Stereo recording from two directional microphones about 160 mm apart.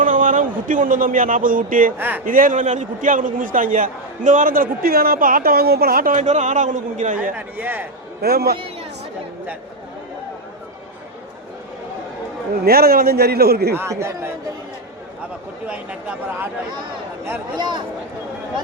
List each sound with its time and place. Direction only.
0.0 s speech: 55° right (ahead or behind)
2.0 s speech: 10° right (ahead or behind)
2.2 s a man's voice: 60° right (ahead or behind)
6.1 s a man's voice: 50° right (ahead or behind)
7.3 s speech: 10° right (ahead or behind)
8.2 s a man's voice: 80° right
12.6 s a man's voice: 70° right (ahead or behind)
13.7 s speech: 15° right (ahead or behind)
15.6 s speech: 5° right (ahead or behind)
17.6 s speech: 30° right (ahead or behind)